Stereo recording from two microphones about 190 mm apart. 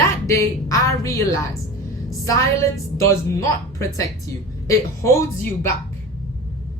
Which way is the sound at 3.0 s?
15° left (ahead or behind).